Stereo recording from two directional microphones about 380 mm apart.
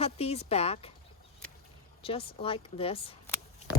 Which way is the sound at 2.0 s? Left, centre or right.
Centre.